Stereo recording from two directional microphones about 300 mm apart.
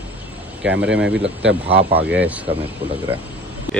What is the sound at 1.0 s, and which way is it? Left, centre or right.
Speech, right.